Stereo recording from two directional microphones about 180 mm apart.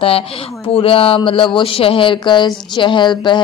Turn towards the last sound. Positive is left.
turn(degrees=25)  # may be behind; listen again after turning